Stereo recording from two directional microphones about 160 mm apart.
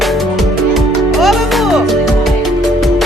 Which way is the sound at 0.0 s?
Centre (ahead or behind).